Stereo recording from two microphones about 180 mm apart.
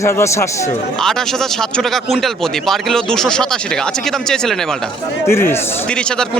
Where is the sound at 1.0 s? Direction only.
Centre (ahead or behind).